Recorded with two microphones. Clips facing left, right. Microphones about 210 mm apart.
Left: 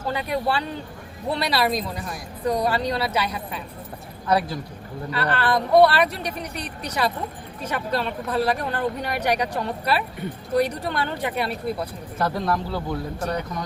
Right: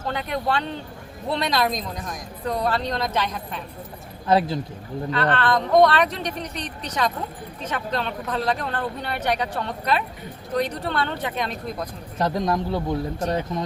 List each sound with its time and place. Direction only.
0.1 s speech: 5° left (ahead or behind)
4.3 s speech: 25° right (ahead or behind)
5.1 s speech: 10° left (ahead or behind)
12.2 s speech: 20° right (ahead or behind)